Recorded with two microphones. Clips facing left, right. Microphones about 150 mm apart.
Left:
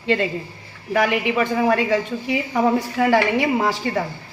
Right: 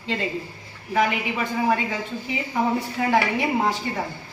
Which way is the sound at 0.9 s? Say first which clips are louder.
Left 3 dB; 75° left (ahead or behind).